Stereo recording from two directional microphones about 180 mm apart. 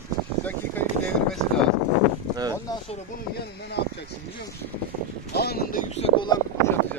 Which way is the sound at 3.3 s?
65° left (ahead or behind).